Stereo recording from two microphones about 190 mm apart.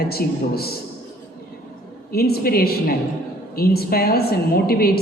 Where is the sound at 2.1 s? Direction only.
55° left (ahead or behind).